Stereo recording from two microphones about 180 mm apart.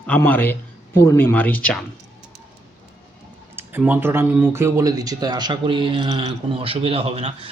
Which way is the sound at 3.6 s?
10° right (ahead or behind).